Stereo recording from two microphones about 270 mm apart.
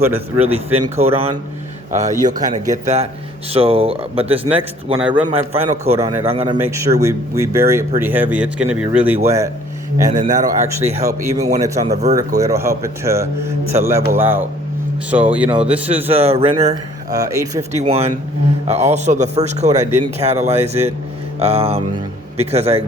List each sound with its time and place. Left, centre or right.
0.0 s speech: centre
0.9 s speech: right
10.1 s speech: right
10.4 s a man's voice: centre
16.1 s speech: right
17.7 s speech: right